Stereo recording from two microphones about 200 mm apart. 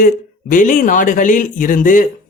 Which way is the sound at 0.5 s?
40° left (ahead or behind).